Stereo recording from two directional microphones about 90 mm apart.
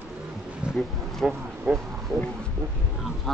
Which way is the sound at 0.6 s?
10° right (ahead or behind).